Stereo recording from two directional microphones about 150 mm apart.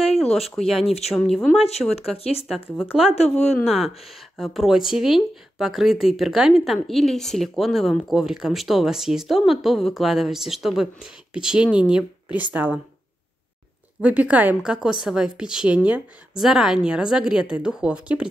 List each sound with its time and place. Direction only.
0.3 s speech: centre (ahead or behind)
0.8 s speech: 45° left (ahead or behind)
1.1 s speech: centre (ahead or behind)
1.6 s speech: 45° left (ahead or behind)
2.8 s speech: 5° right (ahead or behind)
14.0 s speech: 10° right (ahead or behind)